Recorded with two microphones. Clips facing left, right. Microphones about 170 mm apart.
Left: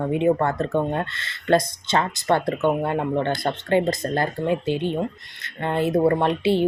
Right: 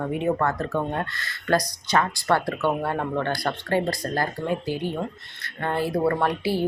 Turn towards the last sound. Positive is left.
turn(degrees=25)  # may be behind; listen again after turning